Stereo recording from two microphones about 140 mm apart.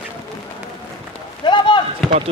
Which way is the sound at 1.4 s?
35° left (ahead or behind).